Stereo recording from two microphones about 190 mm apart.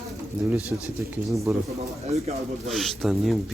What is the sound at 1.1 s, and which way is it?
Speech, 15° right (ahead or behind).